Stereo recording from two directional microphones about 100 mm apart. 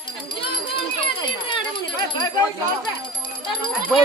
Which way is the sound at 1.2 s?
50° left (ahead or behind).